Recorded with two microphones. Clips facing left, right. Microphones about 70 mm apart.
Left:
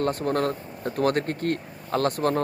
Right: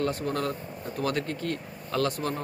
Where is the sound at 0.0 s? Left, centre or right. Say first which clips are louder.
Left 4 dB; left.